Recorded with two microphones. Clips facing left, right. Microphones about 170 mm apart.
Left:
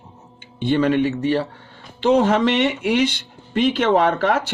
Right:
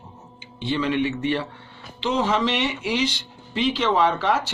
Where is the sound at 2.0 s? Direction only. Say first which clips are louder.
Left 6 dB; 55° left (ahead or behind).